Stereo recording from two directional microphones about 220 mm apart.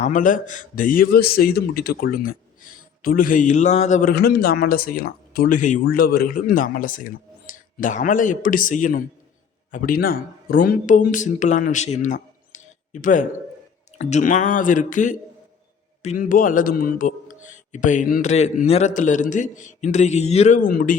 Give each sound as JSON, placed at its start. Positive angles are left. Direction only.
{"t": 0.0, "sound": "speech", "side_deg": 35}
{"t": 4.1, "sound": "speech", "side_deg": 45}